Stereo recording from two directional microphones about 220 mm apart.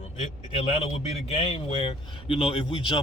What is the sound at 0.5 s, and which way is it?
Speech, 25° left (ahead or behind).